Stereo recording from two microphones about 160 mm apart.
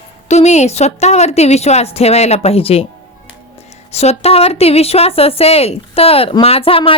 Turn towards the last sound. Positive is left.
turn(degrees=35)  # may be behind; listen again after turning